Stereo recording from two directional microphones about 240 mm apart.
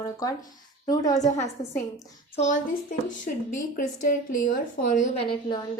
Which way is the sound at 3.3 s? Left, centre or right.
Left.